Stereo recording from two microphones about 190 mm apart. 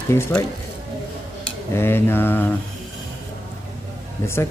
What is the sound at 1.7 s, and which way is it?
Speech, 10° left (ahead or behind).